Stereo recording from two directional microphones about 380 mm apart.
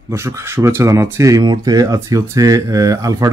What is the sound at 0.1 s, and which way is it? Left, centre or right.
Speech, centre.